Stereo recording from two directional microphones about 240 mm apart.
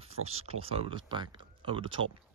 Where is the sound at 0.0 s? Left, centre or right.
Right.